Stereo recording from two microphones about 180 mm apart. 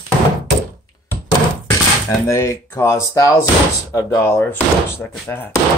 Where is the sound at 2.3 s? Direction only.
15° left (ahead or behind).